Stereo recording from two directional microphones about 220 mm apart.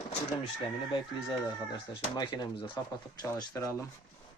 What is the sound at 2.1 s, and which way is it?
Speech, 20° left (ahead or behind).